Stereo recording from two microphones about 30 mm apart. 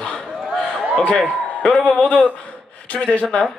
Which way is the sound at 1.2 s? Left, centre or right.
Centre.